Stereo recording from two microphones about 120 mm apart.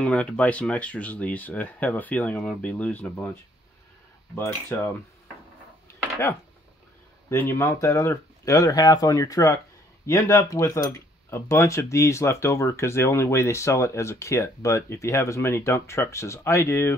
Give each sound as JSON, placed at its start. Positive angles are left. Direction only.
{"t": 0.0, "sound": "speech", "side_deg": 10}
{"t": 4.4, "sound": "speech", "side_deg": 20}
{"t": 7.2, "sound": "speech", "side_deg": 20}